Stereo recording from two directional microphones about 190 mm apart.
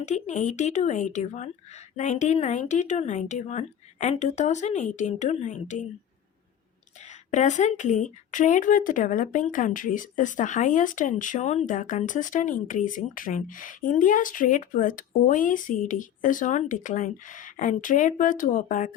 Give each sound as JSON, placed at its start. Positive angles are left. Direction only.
{"t": 0.0, "sound": "speech", "side_deg": 40}
{"t": 7.0, "sound": "speech", "side_deg": 40}